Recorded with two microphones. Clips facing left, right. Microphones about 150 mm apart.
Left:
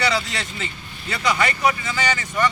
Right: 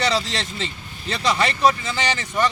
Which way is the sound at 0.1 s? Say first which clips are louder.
Right 1 dB; 25° right (ahead or behind).